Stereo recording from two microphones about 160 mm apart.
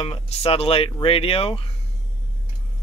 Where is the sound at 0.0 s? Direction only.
40° left (ahead or behind).